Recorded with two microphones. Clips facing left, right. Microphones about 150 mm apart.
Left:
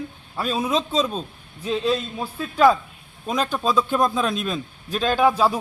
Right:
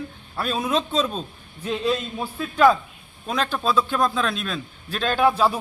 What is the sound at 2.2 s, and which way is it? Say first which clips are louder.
A man's voice: even; 5° left (ahead or behind).